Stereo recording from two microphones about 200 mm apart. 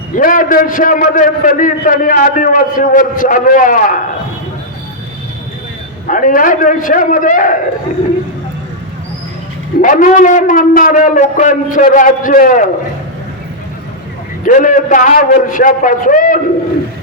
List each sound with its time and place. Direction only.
0.2 s a man's voice: 45° left (ahead or behind)
6.1 s a man's voice: 40° left (ahead or behind)
9.8 s a man's voice: 40° left (ahead or behind)
14.4 s a man's voice: 40° left (ahead or behind)